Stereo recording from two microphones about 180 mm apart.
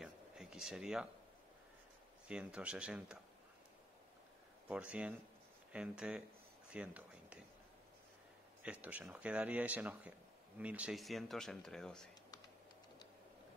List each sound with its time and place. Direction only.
0.0 s a sound: centre (ahead or behind)
2.2 s speech: 5° right (ahead or behind)
4.6 s speech: 5° right (ahead or behind)
8.6 s speech: 10° right (ahead or behind)